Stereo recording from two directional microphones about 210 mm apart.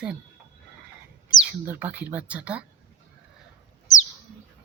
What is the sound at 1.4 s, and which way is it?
Speech, 5° right (ahead or behind).